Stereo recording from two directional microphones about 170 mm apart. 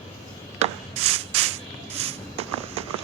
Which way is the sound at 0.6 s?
35° right (ahead or behind).